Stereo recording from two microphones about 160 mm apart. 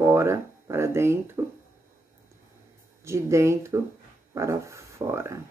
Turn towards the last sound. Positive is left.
turn(degrees=-20)  # may be behind; listen again after turning